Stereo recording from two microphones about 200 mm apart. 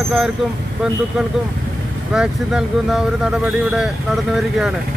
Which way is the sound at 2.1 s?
5° right (ahead or behind).